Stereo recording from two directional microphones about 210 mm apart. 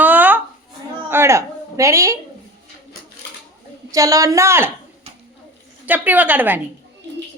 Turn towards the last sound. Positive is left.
turn(degrees=-10)  # may be behind; listen again after turning